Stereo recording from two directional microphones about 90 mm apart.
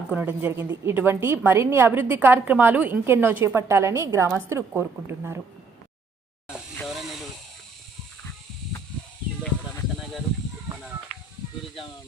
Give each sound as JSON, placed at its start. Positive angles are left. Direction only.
{"t": 0.1, "sound": "a woman's voice", "side_deg": -15}
{"t": 6.8, "sound": "hiss", "side_deg": 0}